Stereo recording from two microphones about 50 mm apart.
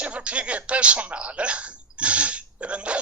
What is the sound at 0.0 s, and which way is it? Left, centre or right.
Speech, right.